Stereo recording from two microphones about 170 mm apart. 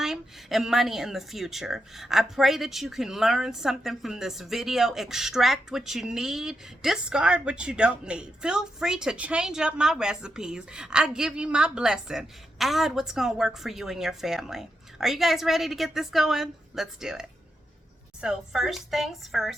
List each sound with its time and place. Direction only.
0.0 s speech: centre (ahead or behind)